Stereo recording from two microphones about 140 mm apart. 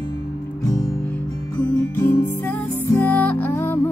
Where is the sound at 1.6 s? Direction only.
15° left (ahead or behind).